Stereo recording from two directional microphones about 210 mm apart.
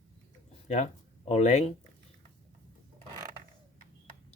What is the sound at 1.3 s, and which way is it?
Speech, 35° left (ahead or behind).